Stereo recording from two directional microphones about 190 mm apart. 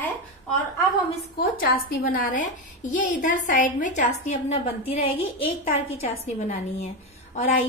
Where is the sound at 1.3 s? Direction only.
50° left (ahead or behind).